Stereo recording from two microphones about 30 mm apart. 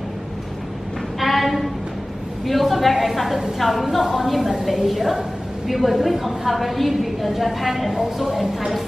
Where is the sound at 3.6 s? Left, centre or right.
Centre.